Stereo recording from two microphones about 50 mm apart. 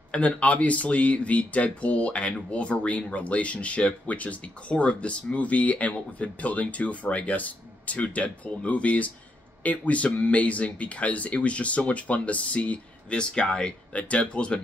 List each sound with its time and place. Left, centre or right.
0.1 s speech: left
13.9 s speech: left